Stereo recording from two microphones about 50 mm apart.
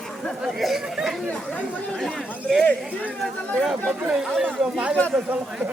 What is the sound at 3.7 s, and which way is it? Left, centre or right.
Speech, centre.